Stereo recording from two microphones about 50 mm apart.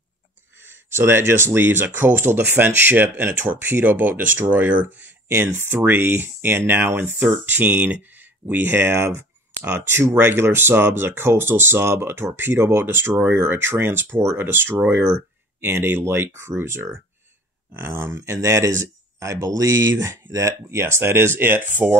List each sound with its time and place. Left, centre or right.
0.6 s speech: right
5.4 s speech: right
7.4 s speech: right